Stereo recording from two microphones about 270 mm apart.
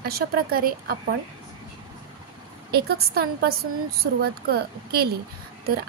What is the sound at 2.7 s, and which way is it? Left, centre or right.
A woman's voice, right.